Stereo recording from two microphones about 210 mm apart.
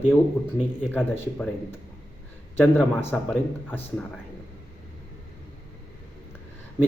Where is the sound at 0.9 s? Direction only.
10° left (ahead or behind).